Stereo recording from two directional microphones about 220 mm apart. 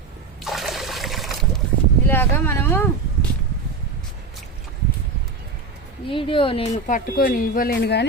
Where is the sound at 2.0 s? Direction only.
10° left (ahead or behind).